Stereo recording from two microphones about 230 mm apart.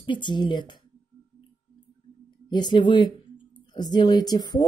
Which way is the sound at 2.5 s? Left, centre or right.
Centre.